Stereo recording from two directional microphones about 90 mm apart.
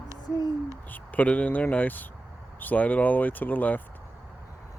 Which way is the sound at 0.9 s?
15° left (ahead or behind).